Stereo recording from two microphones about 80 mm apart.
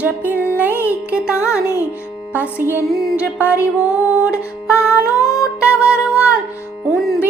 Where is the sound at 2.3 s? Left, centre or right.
Right.